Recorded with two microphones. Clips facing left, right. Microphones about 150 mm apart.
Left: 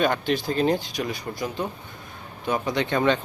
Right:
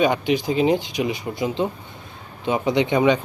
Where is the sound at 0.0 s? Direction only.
15° right (ahead or behind).